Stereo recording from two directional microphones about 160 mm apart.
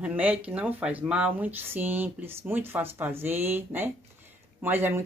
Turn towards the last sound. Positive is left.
turn(degrees=-15)  # may be behind; listen again after turning